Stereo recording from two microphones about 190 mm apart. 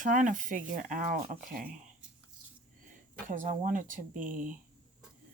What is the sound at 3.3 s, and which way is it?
Speech, 45° right (ahead or behind).